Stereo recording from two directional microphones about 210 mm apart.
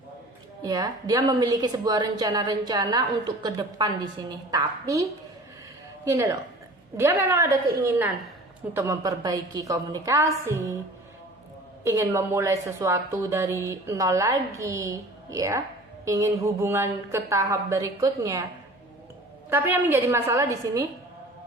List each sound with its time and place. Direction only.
0.6 s a woman's voice: 20° right (ahead or behind)
6.1 s a woman's voice: 15° right (ahead or behind)
11.8 s a woman's voice: 15° right (ahead or behind)
19.5 s a woman's voice: 10° right (ahead or behind)